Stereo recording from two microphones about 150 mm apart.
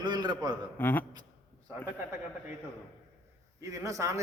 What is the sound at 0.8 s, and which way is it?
Speech, 10° left (ahead or behind).